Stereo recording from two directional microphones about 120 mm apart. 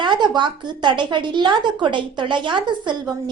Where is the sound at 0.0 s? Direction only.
40° right (ahead or behind).